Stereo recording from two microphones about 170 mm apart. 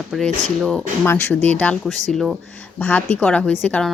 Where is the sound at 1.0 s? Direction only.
15° left (ahead or behind).